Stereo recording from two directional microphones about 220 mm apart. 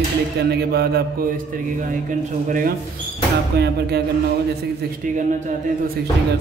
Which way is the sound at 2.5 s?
40° right (ahead or behind).